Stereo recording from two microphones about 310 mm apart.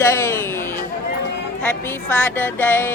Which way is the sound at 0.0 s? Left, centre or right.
Centre.